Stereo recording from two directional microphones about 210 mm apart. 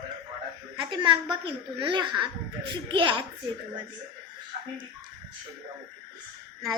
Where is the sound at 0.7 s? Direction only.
20° right (ahead or behind).